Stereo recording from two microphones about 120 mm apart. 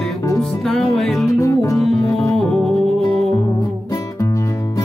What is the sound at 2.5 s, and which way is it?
Music, 5° left (ahead or behind).